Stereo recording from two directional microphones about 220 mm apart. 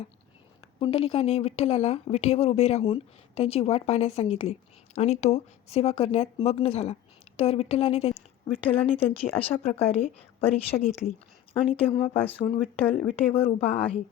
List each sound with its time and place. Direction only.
0.8 s a woman's voice: 25° left (ahead or behind)
12.1 s a woman's voice: 10° left (ahead or behind)